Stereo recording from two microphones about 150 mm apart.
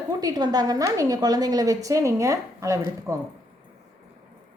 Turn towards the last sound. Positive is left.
turn(degrees=-20)  # may be behind; listen again after turning